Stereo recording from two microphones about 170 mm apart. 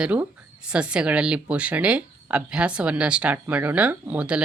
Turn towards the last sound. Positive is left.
turn(degrees=-10)  # may be behind; listen again after turning